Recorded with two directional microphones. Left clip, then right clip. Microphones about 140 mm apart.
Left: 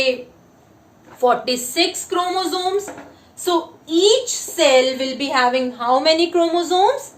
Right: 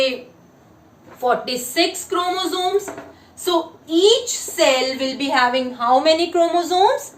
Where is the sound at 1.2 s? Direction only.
60° left (ahead or behind).